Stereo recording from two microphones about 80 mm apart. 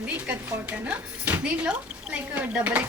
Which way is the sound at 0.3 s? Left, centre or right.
Centre.